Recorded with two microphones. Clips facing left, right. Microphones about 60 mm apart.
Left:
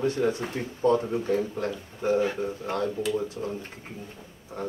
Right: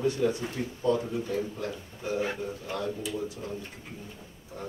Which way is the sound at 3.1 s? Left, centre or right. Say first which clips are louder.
Left 6 dB; left.